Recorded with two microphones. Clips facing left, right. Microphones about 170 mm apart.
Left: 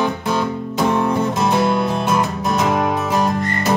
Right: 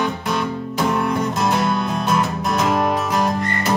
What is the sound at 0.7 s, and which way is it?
Music, 25° left (ahead or behind).